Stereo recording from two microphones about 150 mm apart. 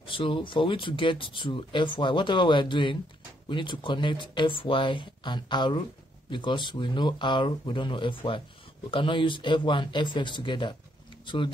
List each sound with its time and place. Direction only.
0.0 s speech: 35° left (ahead or behind)